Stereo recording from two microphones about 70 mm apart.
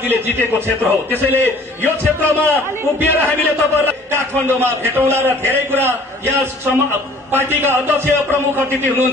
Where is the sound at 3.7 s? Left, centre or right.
Right.